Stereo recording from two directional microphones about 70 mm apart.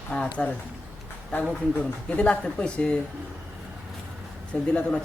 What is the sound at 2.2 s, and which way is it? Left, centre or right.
Speech, centre.